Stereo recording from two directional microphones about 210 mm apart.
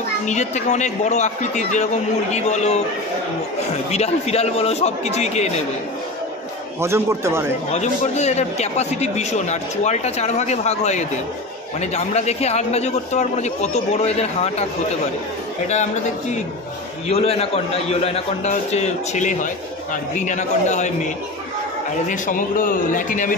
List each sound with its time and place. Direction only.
0.2 s a man's voice: 35° left (ahead or behind)
3.9 s a man's voice: 30° left (ahead or behind)
6.8 s a man's voice: 15° right (ahead or behind)
7.7 s a man's voice: 30° left (ahead or behind)
17.1 s a man's voice: 30° left (ahead or behind)